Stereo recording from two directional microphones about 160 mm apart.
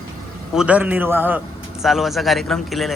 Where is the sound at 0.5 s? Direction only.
5° right (ahead or behind).